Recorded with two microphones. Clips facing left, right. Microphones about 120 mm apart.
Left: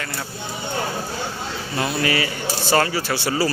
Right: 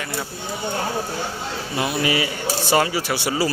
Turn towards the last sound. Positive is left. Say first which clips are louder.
# even
turn(degrees=-15)  # may be behind; listen again after turning